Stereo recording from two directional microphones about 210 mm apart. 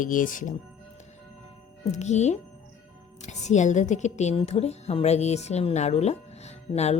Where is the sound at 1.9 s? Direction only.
35° left (ahead or behind).